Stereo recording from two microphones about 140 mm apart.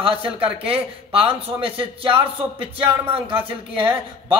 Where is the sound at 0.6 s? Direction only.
40° right (ahead or behind).